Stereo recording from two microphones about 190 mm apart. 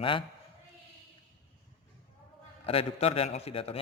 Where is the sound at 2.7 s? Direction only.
30° left (ahead or behind).